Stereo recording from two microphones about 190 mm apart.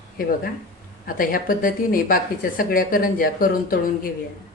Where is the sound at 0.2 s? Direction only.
50° left (ahead or behind).